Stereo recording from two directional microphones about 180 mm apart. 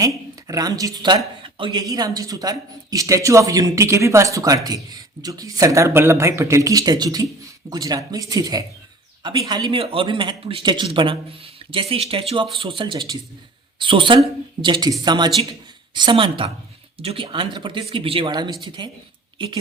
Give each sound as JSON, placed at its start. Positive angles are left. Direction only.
{"t": 0.4, "sound": "speech", "side_deg": -20}